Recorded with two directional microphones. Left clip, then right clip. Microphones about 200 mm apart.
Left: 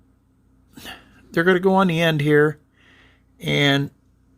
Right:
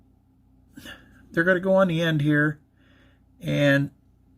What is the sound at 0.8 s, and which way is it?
Speech, 50° left (ahead or behind).